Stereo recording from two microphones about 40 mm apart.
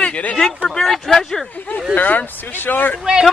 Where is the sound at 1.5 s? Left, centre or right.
Left.